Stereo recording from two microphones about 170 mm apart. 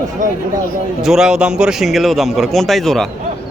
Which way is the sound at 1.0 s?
5° right (ahead or behind).